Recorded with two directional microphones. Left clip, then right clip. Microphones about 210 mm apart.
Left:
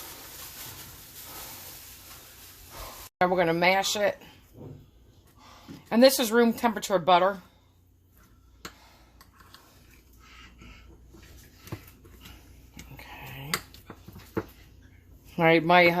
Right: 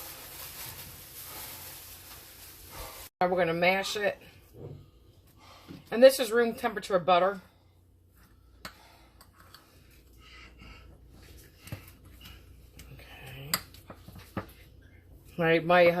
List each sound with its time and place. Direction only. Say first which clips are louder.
3.2 s speech: left 3 dB; 50° left (ahead or behind)
5.9 s speech: even; 55° left (ahead or behind)
15.4 s speech: left 3 dB; 55° left (ahead or behind)